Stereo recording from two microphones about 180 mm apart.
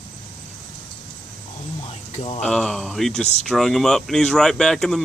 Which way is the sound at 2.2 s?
35° left (ahead or behind).